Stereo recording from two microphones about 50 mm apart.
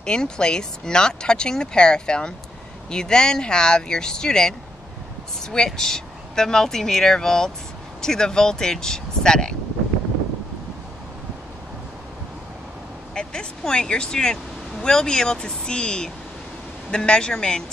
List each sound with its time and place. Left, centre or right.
0.0 s speech: centre
5.7 s speech: centre
13.1 s speech: centre